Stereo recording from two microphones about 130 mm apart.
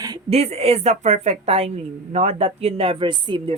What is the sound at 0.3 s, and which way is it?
A woman's voice, 55° right (ahead or behind).